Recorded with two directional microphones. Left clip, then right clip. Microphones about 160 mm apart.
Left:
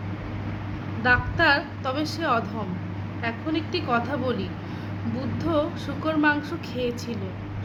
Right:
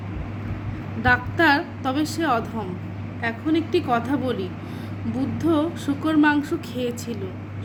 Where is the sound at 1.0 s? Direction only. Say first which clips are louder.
Right 2 dB; 30° right (ahead or behind).